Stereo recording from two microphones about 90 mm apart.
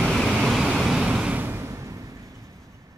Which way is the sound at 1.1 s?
15° right (ahead or behind).